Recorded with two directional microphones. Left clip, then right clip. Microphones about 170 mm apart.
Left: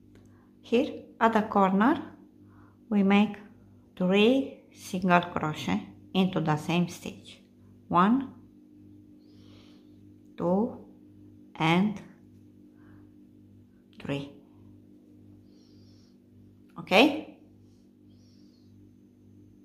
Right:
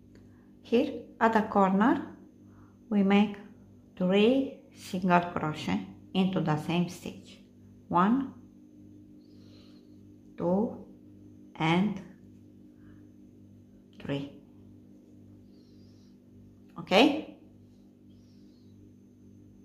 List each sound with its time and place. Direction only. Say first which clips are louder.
0.7 s a woman's voice: left 1 dB; 10° left (ahead or behind)
10.3 s a woman's voice: left 1 dB; 20° left (ahead or behind)
13.9 s music: left 1 dB; 15° left (ahead or behind)
16.7 s speech: left 1 dB; 10° left (ahead or behind)